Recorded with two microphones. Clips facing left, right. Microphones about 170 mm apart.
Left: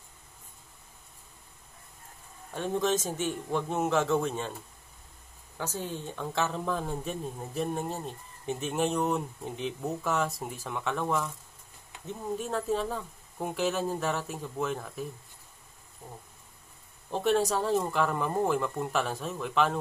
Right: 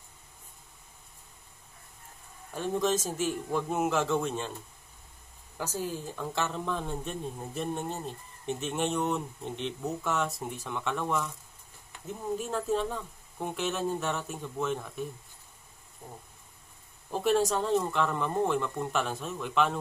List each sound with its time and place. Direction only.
2.5 s a woman's voice: centre (ahead or behind)
5.6 s a woman's voice: 10° right (ahead or behind)
16.0 s insect: 10° right (ahead or behind)
17.1 s a woman's voice: centre (ahead or behind)